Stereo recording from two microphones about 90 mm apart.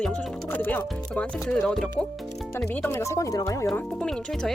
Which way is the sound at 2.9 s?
35° left (ahead or behind).